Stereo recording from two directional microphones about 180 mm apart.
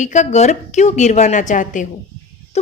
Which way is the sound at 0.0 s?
40° left (ahead or behind).